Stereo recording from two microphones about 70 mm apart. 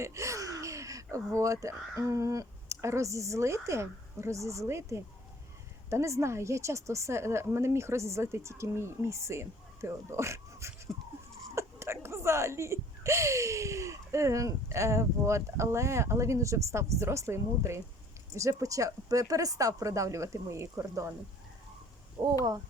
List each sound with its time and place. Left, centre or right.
0.0 s speech: right
18.3 s speech: right